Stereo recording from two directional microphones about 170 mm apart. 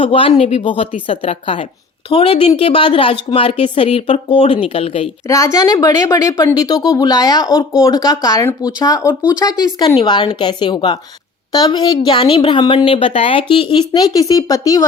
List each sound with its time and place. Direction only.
0.0 s speech: 30° left (ahead or behind)
5.3 s speech: 20° left (ahead or behind)